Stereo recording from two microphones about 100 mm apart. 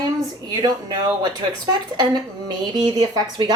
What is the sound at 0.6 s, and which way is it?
A woman's voice, 40° right (ahead or behind).